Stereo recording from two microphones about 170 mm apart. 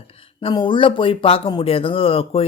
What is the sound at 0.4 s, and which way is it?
Speech, 30° left (ahead or behind).